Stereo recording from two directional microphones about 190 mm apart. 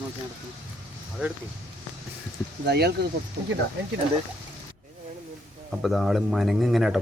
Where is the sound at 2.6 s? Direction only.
60° right (ahead or behind).